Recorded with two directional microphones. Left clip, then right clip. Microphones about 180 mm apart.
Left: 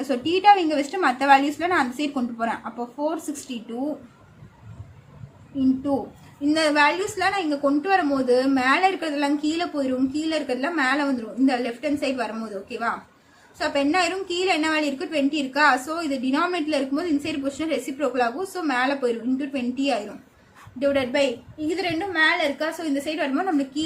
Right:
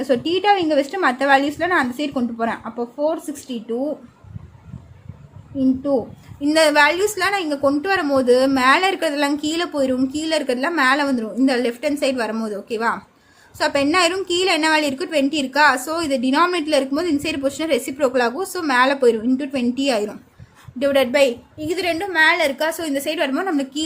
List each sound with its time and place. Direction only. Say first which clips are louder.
0.0 s a woman's voice: right 1 dB; 40° right (ahead or behind)
5.5 s a woman's voice: right 4 dB; 35° right (ahead or behind)
6.4 s a woman's voice: right 5 dB; 65° right (ahead or behind)